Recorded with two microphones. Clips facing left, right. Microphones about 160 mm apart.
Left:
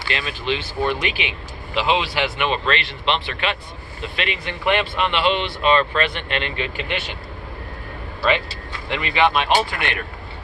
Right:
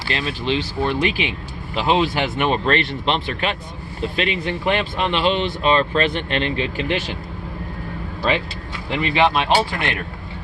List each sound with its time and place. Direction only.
0.0 s speech: 35° right (ahead or behind)
9.0 s speech: 30° right (ahead or behind)